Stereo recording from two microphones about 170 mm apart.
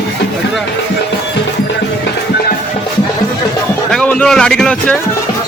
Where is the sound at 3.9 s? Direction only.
5° left (ahead or behind).